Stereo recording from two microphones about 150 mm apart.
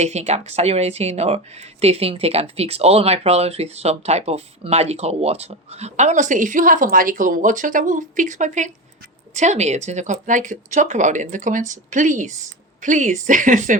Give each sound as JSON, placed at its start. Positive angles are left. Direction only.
{"t": 0.0, "sound": "speech", "side_deg": -50}